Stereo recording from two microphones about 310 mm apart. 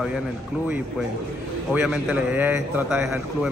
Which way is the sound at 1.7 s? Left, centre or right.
Centre.